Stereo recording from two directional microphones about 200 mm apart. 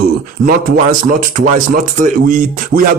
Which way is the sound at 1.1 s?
40° right (ahead or behind).